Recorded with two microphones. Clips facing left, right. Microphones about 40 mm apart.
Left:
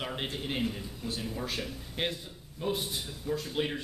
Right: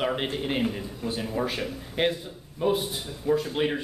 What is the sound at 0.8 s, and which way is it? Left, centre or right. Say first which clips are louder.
Speech: right 6 dB; centre.